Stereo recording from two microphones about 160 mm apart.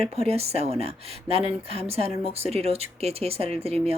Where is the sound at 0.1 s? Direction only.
40° right (ahead or behind).